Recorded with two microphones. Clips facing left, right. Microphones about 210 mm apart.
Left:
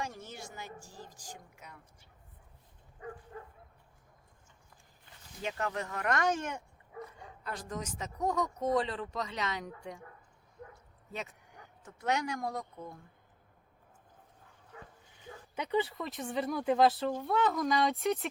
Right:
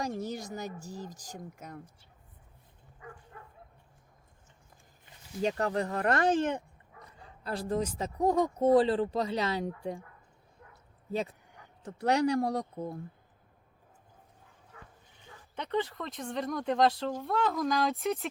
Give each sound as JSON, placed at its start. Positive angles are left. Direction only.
{"t": 0.2, "sound": "speech", "side_deg": -40}
{"t": 3.3, "sound": "bow-wow", "side_deg": 25}
{"t": 5.4, "sound": "speech", "side_deg": -35}
{"t": 11.1, "sound": "speech", "side_deg": -35}
{"t": 15.5, "sound": "speech", "side_deg": 5}